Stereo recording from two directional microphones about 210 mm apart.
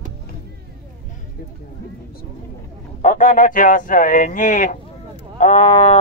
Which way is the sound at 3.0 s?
35° left (ahead or behind).